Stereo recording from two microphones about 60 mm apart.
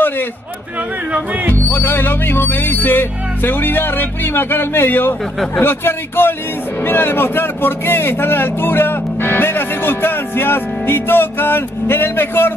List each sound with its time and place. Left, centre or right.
1.5 s speech: left